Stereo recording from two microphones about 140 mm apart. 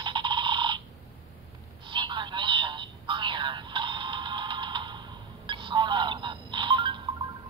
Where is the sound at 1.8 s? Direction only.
35° right (ahead or behind).